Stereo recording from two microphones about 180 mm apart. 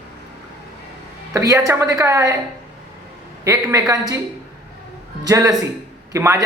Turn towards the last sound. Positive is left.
turn(degrees=-15)  # may be behind; listen again after turning